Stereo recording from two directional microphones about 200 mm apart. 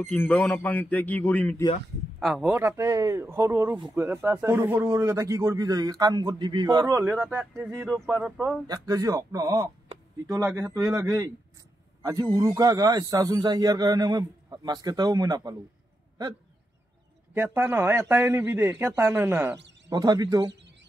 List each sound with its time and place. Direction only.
0.0 s speech: 5° left (ahead or behind)
2.6 s speech: 15° right (ahead or behind)
6.9 s speech: 10° right (ahead or behind)
7.9 s speech: centre (ahead or behind)
8.6 s a man's voice: 15° right (ahead or behind)
17.3 s a man's voice: 10° right (ahead or behind)